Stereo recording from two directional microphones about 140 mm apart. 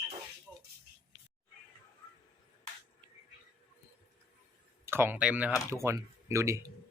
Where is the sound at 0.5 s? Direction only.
15° right (ahead or behind).